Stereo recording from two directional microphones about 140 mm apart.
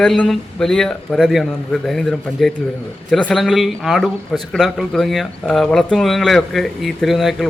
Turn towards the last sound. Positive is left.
turn(degrees=0)  # may be behind; listen again after turning